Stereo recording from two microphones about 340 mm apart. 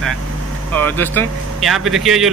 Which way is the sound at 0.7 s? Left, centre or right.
Centre.